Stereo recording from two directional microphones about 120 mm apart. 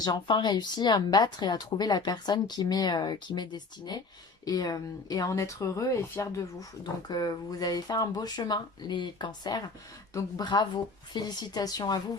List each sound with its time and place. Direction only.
0.0 s speech: 40° left (ahead or behind)